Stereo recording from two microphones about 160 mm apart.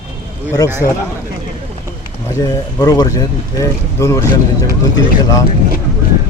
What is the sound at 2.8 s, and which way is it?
Speech, 25° left (ahead or behind).